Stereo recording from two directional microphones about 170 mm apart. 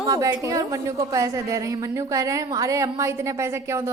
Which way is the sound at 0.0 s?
20° right (ahead or behind).